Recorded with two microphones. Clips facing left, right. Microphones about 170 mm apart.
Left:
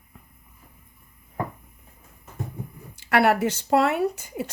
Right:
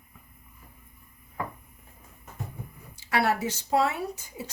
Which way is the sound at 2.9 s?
60° left (ahead or behind).